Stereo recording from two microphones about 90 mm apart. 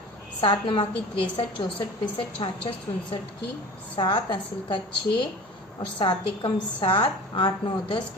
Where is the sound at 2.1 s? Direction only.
70° left (ahead or behind).